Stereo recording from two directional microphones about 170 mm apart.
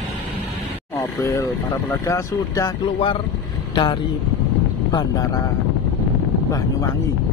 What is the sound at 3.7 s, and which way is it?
Speech, 30° left (ahead or behind).